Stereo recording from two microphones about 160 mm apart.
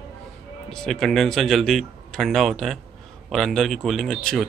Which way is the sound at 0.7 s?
5° left (ahead or behind).